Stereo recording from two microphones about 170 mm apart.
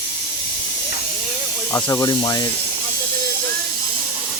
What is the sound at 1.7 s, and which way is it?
Speech, 20° left (ahead or behind).